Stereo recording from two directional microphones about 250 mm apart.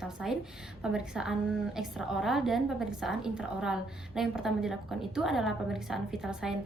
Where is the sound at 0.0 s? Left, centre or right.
Centre.